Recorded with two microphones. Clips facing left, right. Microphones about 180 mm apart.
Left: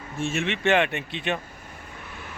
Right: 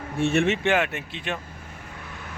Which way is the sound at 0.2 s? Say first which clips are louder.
Right 6 dB; 65° right (ahead or behind).